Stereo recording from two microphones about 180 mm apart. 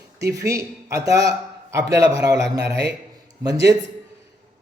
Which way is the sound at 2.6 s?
65° right (ahead or behind).